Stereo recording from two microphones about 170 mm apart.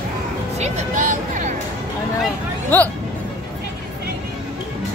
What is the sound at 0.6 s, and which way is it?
Vehicle, 45° right (ahead or behind).